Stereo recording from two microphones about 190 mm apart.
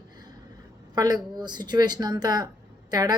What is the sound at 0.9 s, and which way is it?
A woman's voice, 20° right (ahead or behind).